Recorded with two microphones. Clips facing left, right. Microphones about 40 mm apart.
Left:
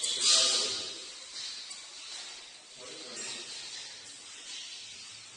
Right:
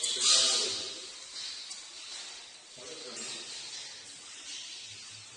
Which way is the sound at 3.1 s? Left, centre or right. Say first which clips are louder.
Left 1 dB; left.